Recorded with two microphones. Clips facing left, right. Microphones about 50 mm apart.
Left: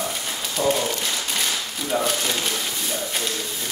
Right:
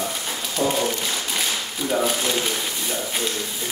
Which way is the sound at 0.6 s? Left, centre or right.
Right.